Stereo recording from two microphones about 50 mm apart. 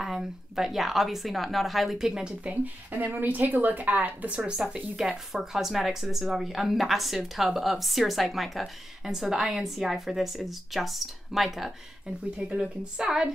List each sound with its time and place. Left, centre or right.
0.0 s speech: centre
2.4 s speech: right
4.6 s speech: centre
12.4 s a woman's voice: centre